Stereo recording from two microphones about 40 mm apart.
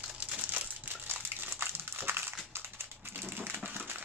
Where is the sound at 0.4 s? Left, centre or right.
Right.